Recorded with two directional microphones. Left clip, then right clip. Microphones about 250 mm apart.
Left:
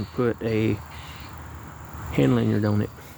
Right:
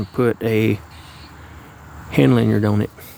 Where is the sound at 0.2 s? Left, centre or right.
Right.